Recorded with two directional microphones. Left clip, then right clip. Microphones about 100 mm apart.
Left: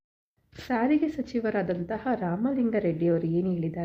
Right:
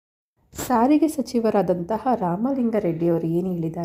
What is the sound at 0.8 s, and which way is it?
Speech, 85° right.